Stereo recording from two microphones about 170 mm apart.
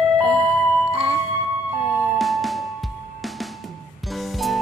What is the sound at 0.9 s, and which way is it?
Music, 35° right (ahead or behind).